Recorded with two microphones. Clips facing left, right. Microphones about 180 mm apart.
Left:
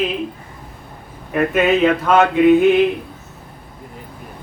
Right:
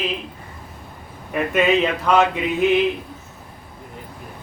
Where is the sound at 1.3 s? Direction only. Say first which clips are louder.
Left 3 dB; centre (ahead or behind).